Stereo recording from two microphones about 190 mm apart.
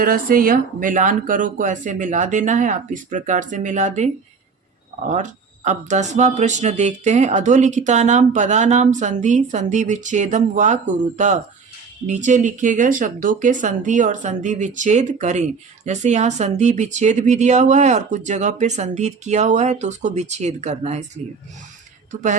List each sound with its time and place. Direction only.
0.0 s speech: 50° right (ahead or behind)
22.1 s a woman's voice: 45° right (ahead or behind)